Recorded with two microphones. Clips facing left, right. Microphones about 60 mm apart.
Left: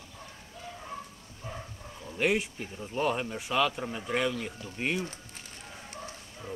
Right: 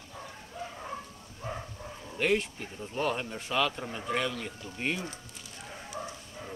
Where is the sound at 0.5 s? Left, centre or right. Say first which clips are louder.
Right 4 dB; right.